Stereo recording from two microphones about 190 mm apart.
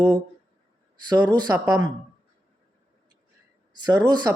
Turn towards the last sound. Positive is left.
turn(degrees=-20)  # may be behind; listen again after turning